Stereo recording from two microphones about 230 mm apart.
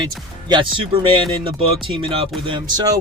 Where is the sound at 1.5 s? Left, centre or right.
Right.